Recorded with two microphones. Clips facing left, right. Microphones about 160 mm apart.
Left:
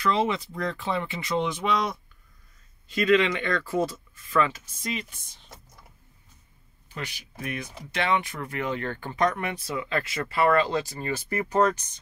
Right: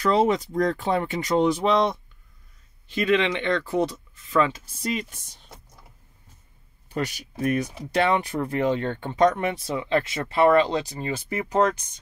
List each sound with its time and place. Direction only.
0.0 s speech: 40° right (ahead or behind); by 4.5 s 25° right (ahead or behind)
4.8 s speech: 40° right (ahead or behind)
6.9 s speech: 45° right (ahead or behind); by 11.6 s 10° right (ahead or behind)